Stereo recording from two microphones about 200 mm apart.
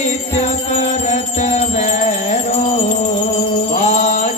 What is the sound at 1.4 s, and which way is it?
Music, 35° left (ahead or behind).